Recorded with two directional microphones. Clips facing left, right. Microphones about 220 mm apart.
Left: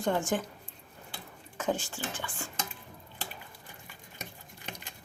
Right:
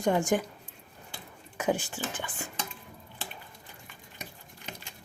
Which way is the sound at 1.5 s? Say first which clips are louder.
Right 3 dB; 15° right (ahead or behind).